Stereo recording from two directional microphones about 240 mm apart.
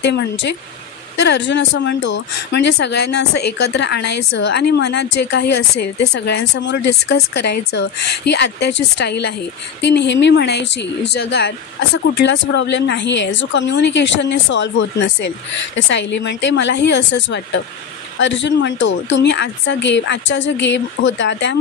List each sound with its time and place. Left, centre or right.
0.0 s a woman's voice: left
3.4 s a woman's voice: left
3.7 s a woman's voice: left
6.1 s a woman's voice: left